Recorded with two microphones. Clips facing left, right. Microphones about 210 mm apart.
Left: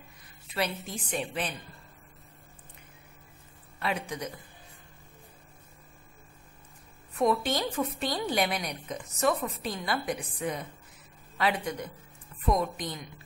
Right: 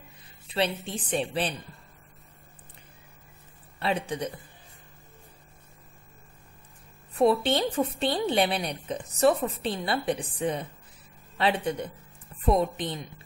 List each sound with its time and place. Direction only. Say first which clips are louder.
0.5 s a woman's voice: right 4 dB; 30° right (ahead or behind)
3.8 s a woman's voice: right 4 dB; 30° right (ahead or behind)
7.2 s a woman's voice: right 4 dB; 30° right (ahead or behind)